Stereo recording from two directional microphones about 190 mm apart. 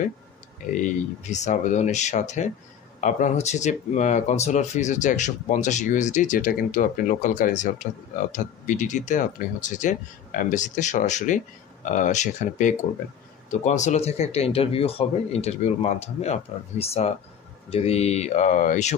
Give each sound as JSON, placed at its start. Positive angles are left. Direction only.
{"t": 0.7, "sound": "speech", "side_deg": 40}